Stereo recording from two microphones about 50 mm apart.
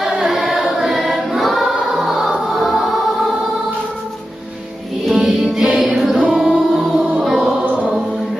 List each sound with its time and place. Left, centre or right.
0.0 s choir: centre
5.0 s music: centre